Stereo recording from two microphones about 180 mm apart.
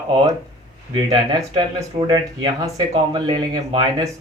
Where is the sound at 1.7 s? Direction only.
20° right (ahead or behind).